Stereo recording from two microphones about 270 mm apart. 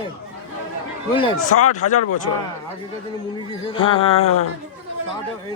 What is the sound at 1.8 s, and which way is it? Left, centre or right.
Speech, left.